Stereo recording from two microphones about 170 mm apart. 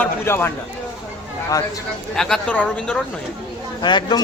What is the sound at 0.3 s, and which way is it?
Speech, 15° left (ahead or behind).